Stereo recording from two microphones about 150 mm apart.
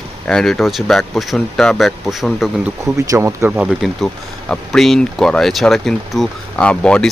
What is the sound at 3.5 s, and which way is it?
Speech, 5° right (ahead or behind).